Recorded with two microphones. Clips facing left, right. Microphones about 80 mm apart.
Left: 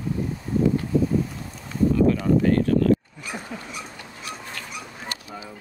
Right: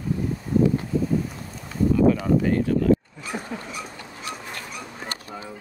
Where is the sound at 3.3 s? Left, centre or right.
Centre.